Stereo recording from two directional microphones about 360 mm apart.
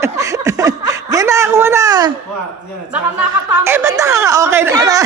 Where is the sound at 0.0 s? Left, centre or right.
Centre.